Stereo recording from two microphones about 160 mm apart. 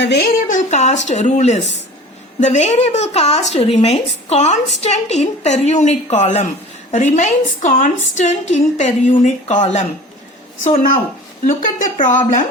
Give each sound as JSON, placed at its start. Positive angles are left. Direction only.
{"t": 0.0, "sound": "a woman's voice", "side_deg": 90}
{"t": 0.4, "sound": "a woman's voice", "side_deg": 50}
{"t": 11.4, "sound": "a woman's voice", "side_deg": 55}